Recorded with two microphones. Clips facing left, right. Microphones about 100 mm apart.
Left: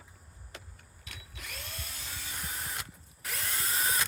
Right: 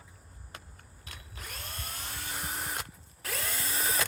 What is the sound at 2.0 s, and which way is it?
Vehicle, 55° right (ahead or behind).